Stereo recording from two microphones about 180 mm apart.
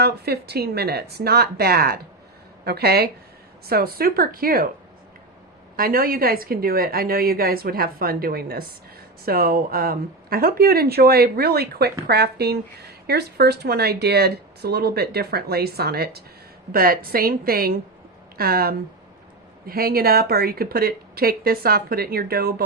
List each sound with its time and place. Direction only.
0.0 s speech: 60° right (ahead or behind)
5.7 s speech: 55° right (ahead or behind)